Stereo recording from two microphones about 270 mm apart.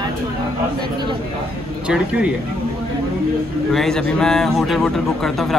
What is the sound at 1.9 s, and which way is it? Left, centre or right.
Speech, centre.